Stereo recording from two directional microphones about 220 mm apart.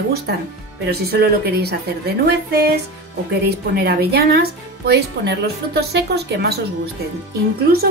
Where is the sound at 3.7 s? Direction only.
45° right (ahead or behind).